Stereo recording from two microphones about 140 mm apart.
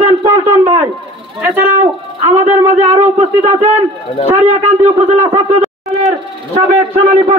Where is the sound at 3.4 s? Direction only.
55° right (ahead or behind).